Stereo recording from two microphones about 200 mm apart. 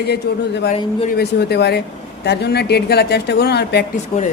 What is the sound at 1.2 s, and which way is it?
Speech, 55° left (ahead or behind).